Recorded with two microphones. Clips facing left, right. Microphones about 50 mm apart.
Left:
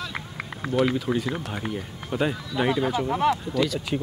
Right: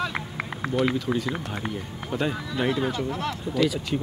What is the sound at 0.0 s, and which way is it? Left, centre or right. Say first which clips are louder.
Run: right 4 dB; centre.